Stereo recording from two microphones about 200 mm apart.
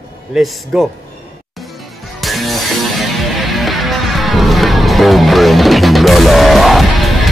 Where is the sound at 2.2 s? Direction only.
Centre (ahead or behind).